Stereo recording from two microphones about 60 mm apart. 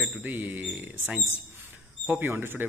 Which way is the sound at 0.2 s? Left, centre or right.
Right.